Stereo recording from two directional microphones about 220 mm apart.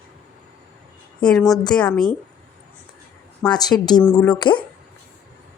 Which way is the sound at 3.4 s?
15° left (ahead or behind).